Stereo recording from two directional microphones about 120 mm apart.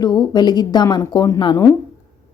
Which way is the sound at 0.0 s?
35° left (ahead or behind).